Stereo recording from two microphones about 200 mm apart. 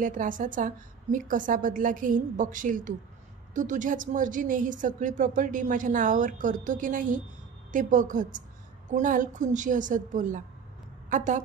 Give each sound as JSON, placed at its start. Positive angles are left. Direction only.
{"t": 0.0, "sound": "a woman's voice", "side_deg": -40}